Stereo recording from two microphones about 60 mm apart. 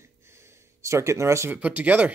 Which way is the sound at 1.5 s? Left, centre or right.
Right.